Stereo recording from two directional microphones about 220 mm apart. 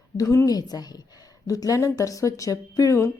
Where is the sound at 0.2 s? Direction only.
15° left (ahead or behind).